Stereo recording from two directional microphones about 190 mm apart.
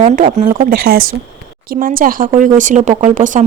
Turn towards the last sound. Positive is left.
turn(degrees=-45)  # may be behind; listen again after turning